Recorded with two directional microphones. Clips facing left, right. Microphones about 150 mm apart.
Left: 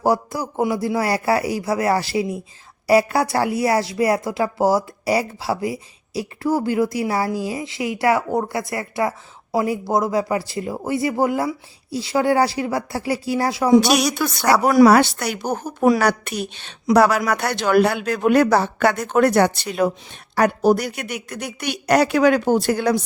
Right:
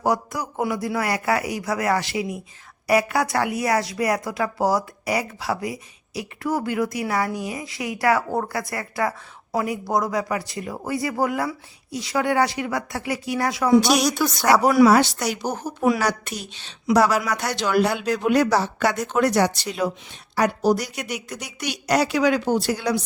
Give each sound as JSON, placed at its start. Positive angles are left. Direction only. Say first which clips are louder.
{"t": 0.0, "sound": "a woman's voice", "louder": "left 3 dB", "side_deg": 30}
{"t": 14.0, "sound": "speech", "louder": "even", "side_deg": 10}
{"t": 14.8, "sound": "a man's voice", "louder": "left 3 dB", "side_deg": 60}